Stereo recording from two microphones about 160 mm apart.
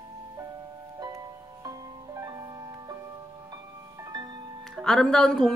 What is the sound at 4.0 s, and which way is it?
Music, 25° right (ahead or behind).